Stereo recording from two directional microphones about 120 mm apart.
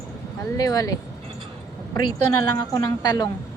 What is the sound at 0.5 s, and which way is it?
Speech, 30° left (ahead or behind).